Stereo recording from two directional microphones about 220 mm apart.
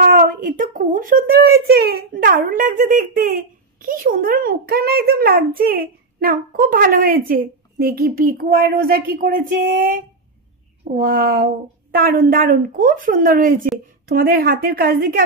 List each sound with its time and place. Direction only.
0.0 s speech: 35° right (ahead or behind)